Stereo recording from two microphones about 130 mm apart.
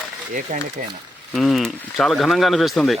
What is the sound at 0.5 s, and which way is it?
Speech, 65° right (ahead or behind).